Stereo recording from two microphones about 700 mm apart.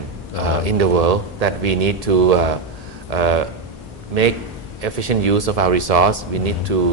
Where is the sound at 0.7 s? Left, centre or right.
Right.